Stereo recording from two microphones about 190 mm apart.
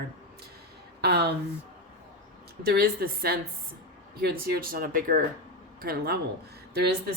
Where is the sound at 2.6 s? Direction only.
55° right (ahead or behind).